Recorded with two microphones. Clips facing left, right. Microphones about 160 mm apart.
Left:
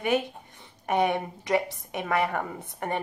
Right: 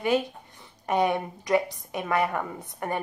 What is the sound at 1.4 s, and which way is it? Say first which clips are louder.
Speech: right 2 dB; 20° left (ahead or behind).